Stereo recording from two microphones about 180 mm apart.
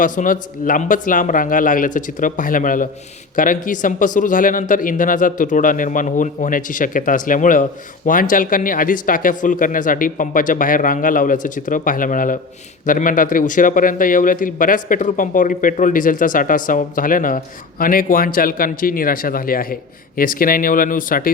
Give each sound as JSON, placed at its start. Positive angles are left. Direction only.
{"t": 0.0, "sound": "speech", "side_deg": 50}